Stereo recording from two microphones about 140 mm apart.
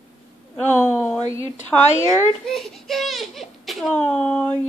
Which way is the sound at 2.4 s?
5° left (ahead or behind).